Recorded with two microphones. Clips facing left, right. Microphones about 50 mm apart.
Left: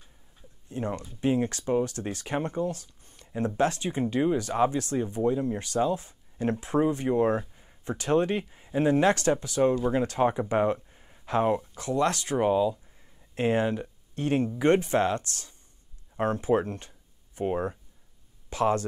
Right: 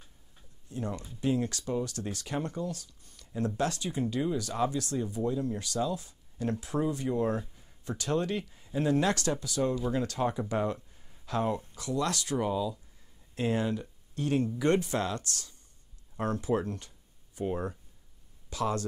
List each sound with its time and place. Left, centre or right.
0.7 s speech: left